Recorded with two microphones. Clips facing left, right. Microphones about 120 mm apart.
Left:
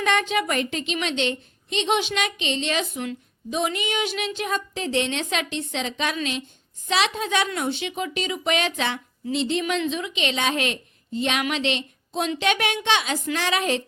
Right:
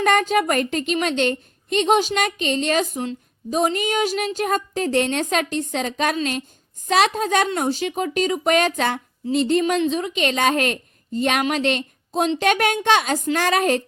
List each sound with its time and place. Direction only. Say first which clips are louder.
0.0 s a woman's voice: right 5 dB; 45° right (ahead or behind)